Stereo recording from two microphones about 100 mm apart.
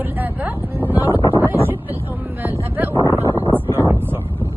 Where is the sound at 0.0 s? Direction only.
15° right (ahead or behind).